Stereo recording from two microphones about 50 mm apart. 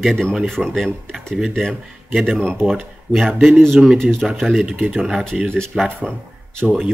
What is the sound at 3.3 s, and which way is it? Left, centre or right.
Speech, right.